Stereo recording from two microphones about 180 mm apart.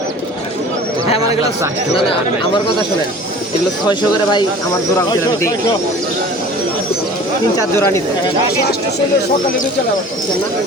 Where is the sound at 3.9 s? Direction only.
25° left (ahead or behind).